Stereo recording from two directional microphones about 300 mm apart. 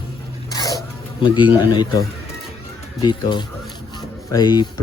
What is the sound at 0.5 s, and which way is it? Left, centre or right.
Zipper, centre.